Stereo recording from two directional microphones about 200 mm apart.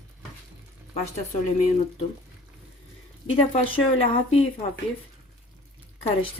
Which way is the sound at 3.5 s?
30° left (ahead or behind).